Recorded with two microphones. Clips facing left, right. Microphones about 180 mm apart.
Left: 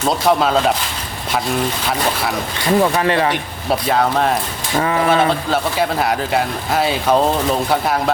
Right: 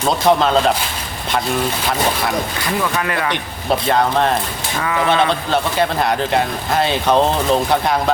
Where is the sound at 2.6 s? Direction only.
30° left (ahead or behind).